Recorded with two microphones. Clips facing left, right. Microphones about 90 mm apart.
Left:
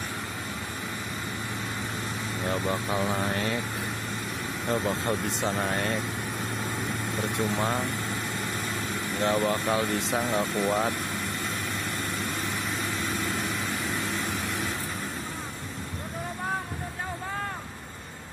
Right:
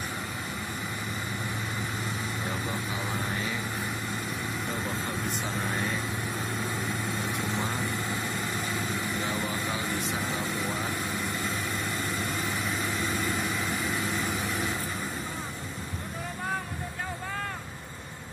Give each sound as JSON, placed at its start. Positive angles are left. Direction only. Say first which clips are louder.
{"t": 2.7, "sound": "speech", "louder": "left 5 dB", "side_deg": 65}
{"t": 4.8, "sound": "speech", "louder": "left 4 dB", "side_deg": 80}
{"t": 9.2, "sound": "speech", "louder": "left 6 dB", "side_deg": 65}
{"t": 12.2, "sound": "vehicle", "louder": "even", "side_deg": 0}